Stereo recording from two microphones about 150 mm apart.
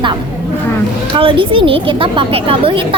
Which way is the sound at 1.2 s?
35° right (ahead or behind).